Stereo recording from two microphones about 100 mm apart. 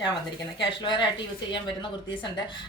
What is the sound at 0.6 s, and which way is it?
Speech, 50° left (ahead or behind).